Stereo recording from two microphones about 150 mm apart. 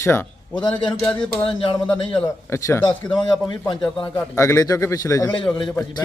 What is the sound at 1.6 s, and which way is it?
Speech, 35° left (ahead or behind).